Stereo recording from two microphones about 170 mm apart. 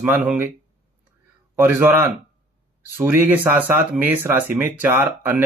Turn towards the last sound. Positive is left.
turn(degrees=-15)  # may be behind; listen again after turning